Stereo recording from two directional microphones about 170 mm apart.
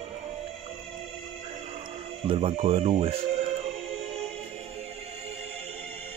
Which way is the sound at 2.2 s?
35° right (ahead or behind).